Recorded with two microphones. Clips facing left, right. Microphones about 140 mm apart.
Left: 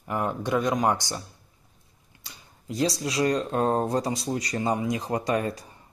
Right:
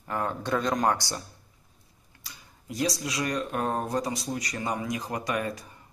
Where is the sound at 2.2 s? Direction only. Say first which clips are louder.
Left 3 dB; 25° left (ahead or behind).